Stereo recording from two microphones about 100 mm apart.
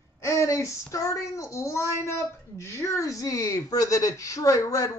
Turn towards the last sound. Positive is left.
turn(degrees=35)  # may be behind; listen again after turning